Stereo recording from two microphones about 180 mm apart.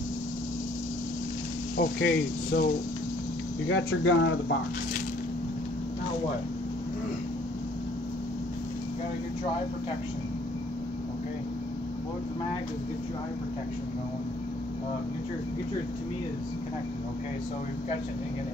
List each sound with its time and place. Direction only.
1.8 s speech: 70° left (ahead or behind)
3.6 s speech: 90° left